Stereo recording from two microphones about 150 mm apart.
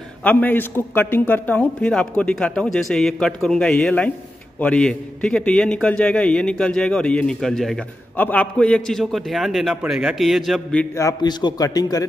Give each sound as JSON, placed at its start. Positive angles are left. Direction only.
{"t": 0.2, "sound": "a man's voice", "side_deg": 10}
{"t": 11.0, "sound": "a man's voice", "side_deg": 25}